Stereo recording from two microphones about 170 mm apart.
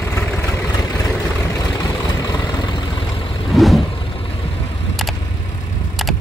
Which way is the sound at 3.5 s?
Centre (ahead or behind).